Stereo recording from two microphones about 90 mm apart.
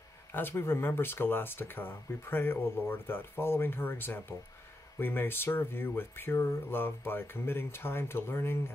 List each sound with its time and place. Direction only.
0.3 s speech: 25° left (ahead or behind)